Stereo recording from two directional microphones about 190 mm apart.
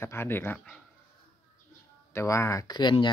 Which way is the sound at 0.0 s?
10° left (ahead or behind).